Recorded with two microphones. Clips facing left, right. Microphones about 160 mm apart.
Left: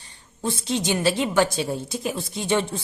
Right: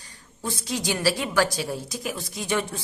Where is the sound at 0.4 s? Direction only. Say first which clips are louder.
Left 4 dB; 25° left (ahead or behind).